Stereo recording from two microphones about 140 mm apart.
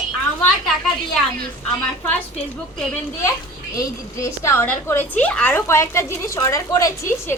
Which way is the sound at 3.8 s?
20° left (ahead or behind).